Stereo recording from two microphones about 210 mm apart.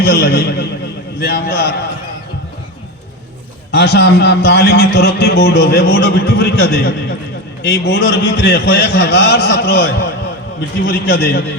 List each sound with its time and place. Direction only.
0.0 s a man's voice: 45° left (ahead or behind)
3.7 s a man's voice: 50° left (ahead or behind)